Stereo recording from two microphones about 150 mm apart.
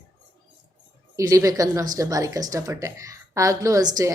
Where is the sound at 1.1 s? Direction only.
20° right (ahead or behind).